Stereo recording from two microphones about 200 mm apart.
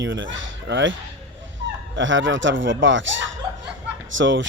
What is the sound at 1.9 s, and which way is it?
Speech, 70° right (ahead or behind).